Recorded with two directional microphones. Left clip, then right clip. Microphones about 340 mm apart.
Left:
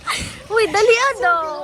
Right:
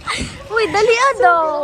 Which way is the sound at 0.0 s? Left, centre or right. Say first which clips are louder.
Right 1 dB; centre.